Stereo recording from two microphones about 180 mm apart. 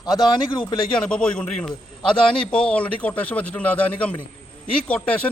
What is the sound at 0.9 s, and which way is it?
A man's voice, 5° left (ahead or behind).